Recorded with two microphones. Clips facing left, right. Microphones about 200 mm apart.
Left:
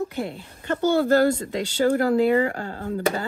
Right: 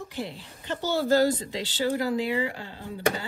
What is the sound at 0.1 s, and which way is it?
Speech, 55° left (ahead or behind).